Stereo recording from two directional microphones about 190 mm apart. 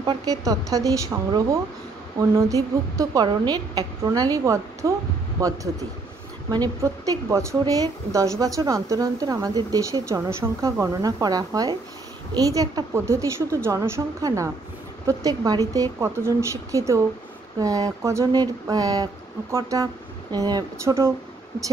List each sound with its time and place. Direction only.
0.0 s a woman's voice: 20° right (ahead or behind)